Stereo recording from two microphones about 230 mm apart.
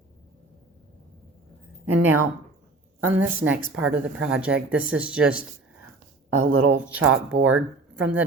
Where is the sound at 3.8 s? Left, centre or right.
Centre.